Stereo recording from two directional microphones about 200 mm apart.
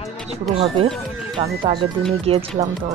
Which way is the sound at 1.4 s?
25° right (ahead or behind).